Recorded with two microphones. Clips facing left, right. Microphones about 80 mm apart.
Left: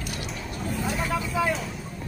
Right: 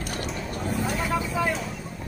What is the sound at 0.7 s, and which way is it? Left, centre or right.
Vehicle, centre.